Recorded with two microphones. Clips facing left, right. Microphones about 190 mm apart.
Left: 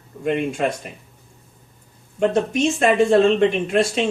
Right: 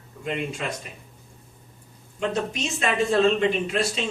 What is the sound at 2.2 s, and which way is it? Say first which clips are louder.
A man's voice: left 8 dB; 50° left (ahead or behind).